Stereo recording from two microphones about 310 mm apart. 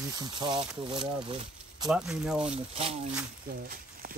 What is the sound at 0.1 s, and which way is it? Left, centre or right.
Speech, centre.